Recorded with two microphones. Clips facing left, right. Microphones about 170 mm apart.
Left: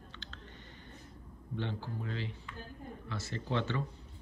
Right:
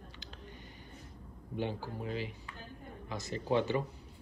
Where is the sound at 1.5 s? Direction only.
15° right (ahead or behind).